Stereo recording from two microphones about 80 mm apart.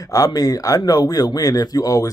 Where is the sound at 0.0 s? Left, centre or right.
Left.